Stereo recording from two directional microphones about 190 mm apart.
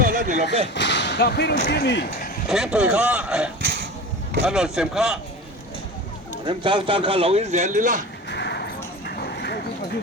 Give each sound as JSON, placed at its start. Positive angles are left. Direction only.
{"t": 0.0, "sound": "a sound", "side_deg": -45}
{"t": 0.7, "sound": "speech", "side_deg": 65}
{"t": 2.5, "sound": "speech", "side_deg": -5}
{"t": 6.4, "sound": "speech", "side_deg": -25}
{"t": 8.3, "sound": "horse", "side_deg": 65}